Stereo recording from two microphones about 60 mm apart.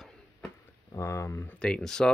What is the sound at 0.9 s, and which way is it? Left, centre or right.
Speech, left.